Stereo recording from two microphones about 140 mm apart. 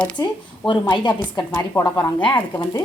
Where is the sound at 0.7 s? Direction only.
35° left (ahead or behind).